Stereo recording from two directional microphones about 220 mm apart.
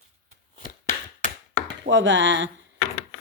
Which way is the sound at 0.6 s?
35° left (ahead or behind).